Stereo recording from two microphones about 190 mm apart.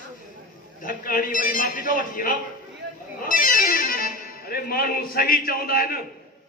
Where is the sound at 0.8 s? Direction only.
45° left (ahead or behind).